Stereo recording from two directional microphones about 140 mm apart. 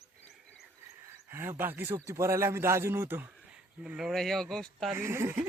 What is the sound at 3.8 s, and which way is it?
Speech, 5° right (ahead or behind).